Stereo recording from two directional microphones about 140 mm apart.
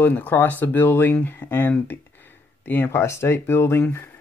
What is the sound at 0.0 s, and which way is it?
Speech, 10° left (ahead or behind).